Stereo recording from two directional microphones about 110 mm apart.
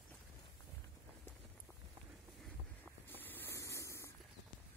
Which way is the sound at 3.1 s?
15° left (ahead or behind).